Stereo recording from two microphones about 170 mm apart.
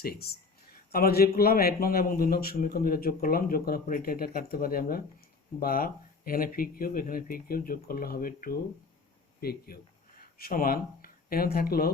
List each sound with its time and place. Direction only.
0.0 s a man's voice: 65° left (ahead or behind)